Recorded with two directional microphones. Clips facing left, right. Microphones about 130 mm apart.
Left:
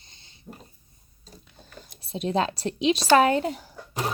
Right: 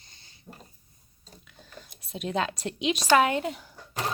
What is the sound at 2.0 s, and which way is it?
A woman's voice, 30° left (ahead or behind).